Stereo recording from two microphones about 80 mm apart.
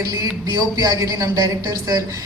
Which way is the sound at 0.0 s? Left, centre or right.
Right.